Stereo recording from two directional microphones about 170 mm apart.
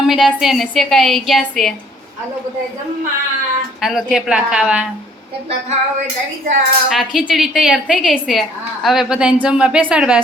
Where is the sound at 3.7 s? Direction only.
Centre (ahead or behind).